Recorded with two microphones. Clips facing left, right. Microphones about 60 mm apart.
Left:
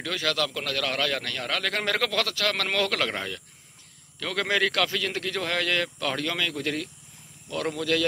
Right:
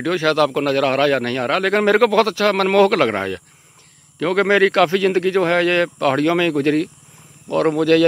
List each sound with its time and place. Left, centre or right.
0.0 s a man's voice: right